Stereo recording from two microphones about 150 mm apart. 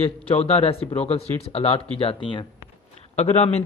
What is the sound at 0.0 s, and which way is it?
Speech, 40° left (ahead or behind).